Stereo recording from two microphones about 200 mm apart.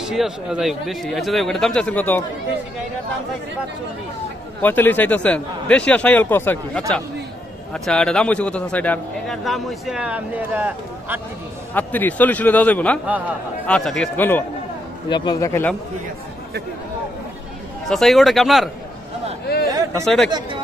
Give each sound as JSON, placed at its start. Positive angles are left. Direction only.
{"t": 0.0, "sound": "a man's voice", "side_deg": 0}
{"t": 4.6, "sound": "a man's voice", "side_deg": 10}
{"t": 11.7, "sound": "a man's voice", "side_deg": 10}
{"t": 15.0, "sound": "a man's voice", "side_deg": 20}
{"t": 17.8, "sound": "a man's voice", "side_deg": 0}
{"t": 19.7, "sound": "a sound", "side_deg": -15}
{"t": 20.2, "sound": "speech", "side_deg": -20}